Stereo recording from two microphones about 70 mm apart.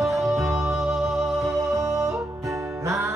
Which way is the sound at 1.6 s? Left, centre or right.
Right.